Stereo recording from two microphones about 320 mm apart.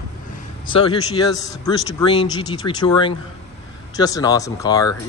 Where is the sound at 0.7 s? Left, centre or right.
Centre.